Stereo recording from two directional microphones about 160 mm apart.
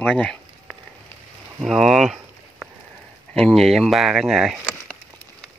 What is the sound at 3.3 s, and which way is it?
Speech, centre (ahead or behind).